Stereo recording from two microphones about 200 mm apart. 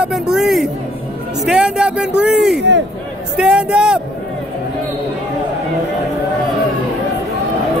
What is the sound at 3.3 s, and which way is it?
Speech, 5° right (ahead or behind).